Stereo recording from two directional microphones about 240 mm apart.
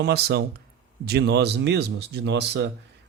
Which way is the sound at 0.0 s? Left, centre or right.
Right.